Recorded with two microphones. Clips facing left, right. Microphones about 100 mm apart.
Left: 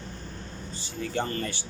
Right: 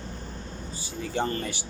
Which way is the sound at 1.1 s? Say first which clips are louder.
Right 2 dB; 15° right (ahead or behind).